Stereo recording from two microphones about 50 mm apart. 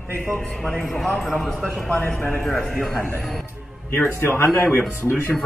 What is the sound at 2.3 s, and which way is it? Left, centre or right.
Speech, centre.